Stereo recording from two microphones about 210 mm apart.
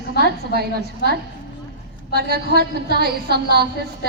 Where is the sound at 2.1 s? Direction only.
45° right (ahead or behind).